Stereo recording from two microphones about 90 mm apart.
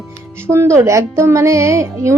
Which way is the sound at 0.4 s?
30° right (ahead or behind).